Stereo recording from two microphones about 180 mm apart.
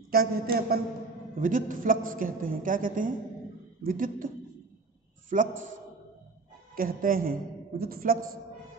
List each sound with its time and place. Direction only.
0.1 s a woman's voice: 55° right (ahead or behind)
5.3 s a woman's voice: 45° right (ahead or behind)
6.7 s a woman's voice: 50° right (ahead or behind)